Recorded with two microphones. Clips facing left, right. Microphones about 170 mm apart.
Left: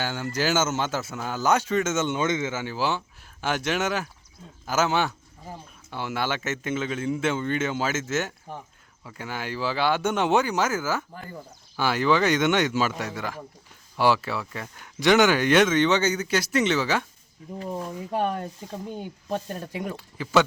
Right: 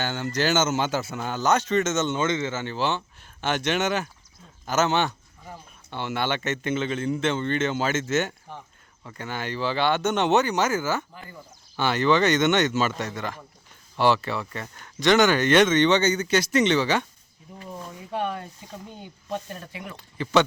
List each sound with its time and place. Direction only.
0.0 s speech: 5° left (ahead or behind)
17.6 s speech: 40° left (ahead or behind)
20.0 s speech: 5° left (ahead or behind)